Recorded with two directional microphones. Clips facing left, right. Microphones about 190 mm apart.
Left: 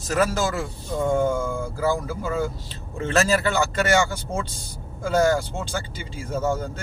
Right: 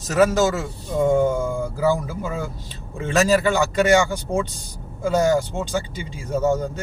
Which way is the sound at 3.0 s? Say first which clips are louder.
Right 3 dB; 15° right (ahead or behind).